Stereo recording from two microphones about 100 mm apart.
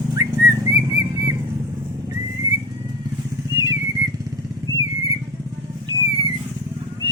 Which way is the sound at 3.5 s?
40° right (ahead or behind).